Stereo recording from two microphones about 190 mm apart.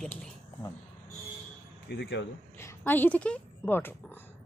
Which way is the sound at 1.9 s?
65° left (ahead or behind).